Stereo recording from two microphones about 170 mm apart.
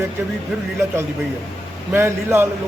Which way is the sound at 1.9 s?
15° right (ahead or behind).